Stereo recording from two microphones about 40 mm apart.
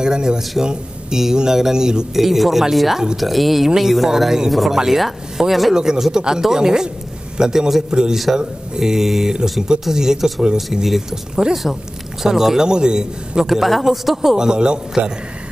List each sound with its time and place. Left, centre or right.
0.0 s a man's voice: centre
2.1 s a man's voice: centre
13.5 s speech: centre
14.3 s a man's voice: right